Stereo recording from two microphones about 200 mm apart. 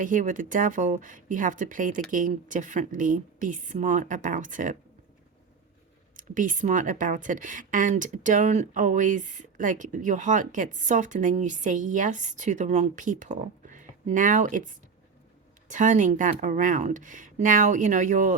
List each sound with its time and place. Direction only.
0.0 s speech: 40° right (ahead or behind)
6.1 s speech: 40° right (ahead or behind)